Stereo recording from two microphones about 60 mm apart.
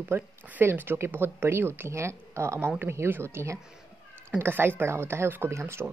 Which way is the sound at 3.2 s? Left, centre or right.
Right.